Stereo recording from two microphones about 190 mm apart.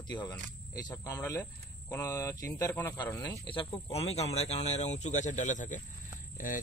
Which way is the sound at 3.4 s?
30° left (ahead or behind).